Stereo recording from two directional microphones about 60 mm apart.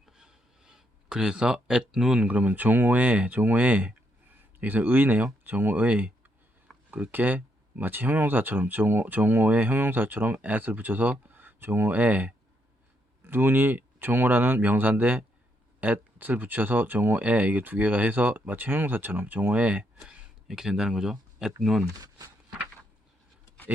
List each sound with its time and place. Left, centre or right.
0.0 s a sound: centre
2.2 s speech: right
20.5 s speech: centre
21.8 s speech: right